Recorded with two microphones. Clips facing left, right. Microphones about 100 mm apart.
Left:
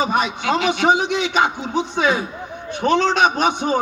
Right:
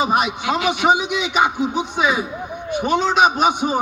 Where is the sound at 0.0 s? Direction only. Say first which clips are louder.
Right 1 dB; 15° right (ahead or behind).